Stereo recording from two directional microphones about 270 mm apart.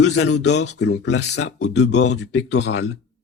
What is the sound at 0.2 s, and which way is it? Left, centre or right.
Speech, left.